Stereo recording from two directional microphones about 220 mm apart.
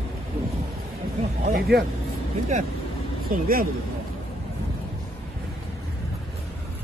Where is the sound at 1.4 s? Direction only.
45° right (ahead or behind).